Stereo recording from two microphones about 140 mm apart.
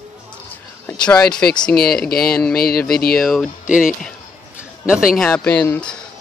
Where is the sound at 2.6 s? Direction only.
90° left.